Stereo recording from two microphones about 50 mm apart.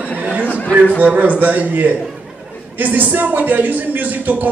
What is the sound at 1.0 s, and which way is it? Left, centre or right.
A man's voice, right.